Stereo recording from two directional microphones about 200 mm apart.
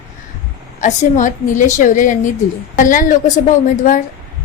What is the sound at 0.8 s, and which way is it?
A woman's voice, 40° left (ahead or behind).